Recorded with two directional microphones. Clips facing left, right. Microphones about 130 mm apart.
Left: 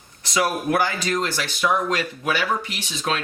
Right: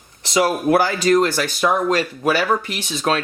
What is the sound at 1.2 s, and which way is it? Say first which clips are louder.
Speech: right 6 dB; 45° right (ahead or behind).